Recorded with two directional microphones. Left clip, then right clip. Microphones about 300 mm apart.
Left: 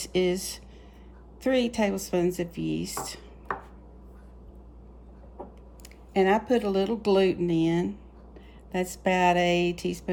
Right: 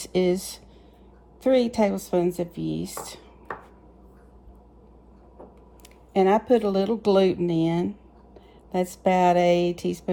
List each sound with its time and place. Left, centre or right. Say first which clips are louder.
0.0 s speech: right 3 dB; centre
6.1 s speech: right 3 dB; centre